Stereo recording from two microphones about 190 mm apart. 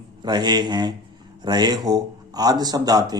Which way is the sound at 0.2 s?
20° right (ahead or behind).